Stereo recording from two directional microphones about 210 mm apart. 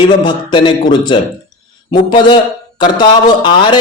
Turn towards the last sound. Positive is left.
turn(degrees=20)  # may be behind; listen again after turning